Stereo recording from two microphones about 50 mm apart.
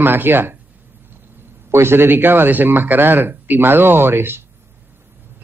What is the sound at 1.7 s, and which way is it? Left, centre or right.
A man's voice, right.